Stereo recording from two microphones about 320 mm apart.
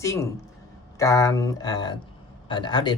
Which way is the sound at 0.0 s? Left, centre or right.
Centre.